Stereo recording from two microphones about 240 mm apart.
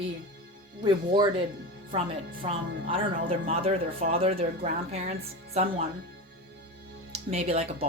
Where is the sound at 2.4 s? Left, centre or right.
Right.